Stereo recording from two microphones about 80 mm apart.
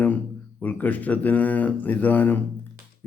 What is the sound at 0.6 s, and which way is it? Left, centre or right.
Mantra, centre.